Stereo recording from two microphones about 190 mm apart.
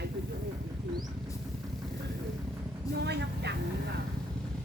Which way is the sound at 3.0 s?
60° right (ahead or behind).